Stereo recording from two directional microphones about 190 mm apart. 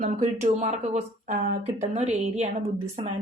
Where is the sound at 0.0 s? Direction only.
40° right (ahead or behind).